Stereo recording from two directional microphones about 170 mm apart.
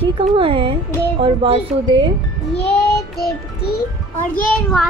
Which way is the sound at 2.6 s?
70° left (ahead or behind).